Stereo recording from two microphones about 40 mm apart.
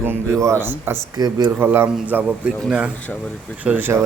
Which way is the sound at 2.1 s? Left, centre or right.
Right.